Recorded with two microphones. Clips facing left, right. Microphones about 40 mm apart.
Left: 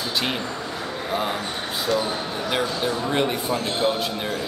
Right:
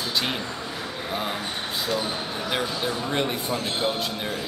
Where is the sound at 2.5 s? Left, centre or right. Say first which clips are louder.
Left 3 dB; centre.